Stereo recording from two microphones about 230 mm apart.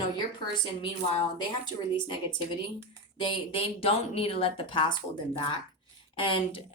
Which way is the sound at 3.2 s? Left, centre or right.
Left.